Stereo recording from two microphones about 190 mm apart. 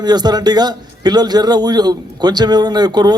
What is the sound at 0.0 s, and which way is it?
Speech, 20° right (ahead or behind).